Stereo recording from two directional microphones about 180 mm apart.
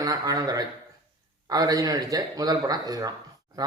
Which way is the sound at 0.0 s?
20° right (ahead or behind).